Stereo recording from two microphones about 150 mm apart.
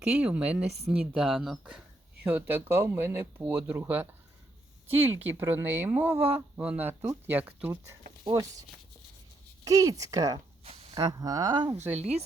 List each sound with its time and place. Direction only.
0.0 s speech: 5° right (ahead or behind)
5.0 s speech: 15° right (ahead or behind)
6.1 s speech: 40° right (ahead or behind)
6.3 s speech: 10° right (ahead or behind)
9.6 s speech: 20° right (ahead or behind)
11.8 s a woman's voice: 45° right (ahead or behind)